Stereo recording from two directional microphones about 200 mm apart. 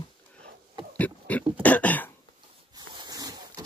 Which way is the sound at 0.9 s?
5° left (ahead or behind).